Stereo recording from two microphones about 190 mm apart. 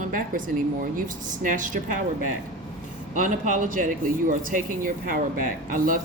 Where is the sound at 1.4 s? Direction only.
45° right (ahead or behind).